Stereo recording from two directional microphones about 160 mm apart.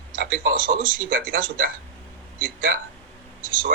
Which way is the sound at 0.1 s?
65° right (ahead or behind).